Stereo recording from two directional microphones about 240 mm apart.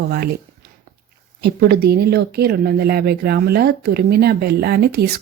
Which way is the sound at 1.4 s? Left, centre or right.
Right.